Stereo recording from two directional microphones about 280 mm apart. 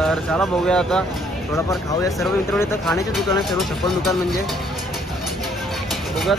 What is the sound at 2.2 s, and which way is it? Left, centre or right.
Speech, centre.